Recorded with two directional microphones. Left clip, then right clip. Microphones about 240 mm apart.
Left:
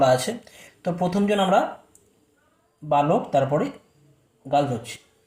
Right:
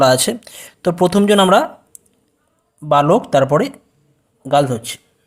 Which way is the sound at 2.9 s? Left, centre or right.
Right.